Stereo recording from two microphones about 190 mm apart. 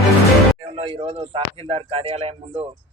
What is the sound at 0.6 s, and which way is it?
Speech, 30° right (ahead or behind).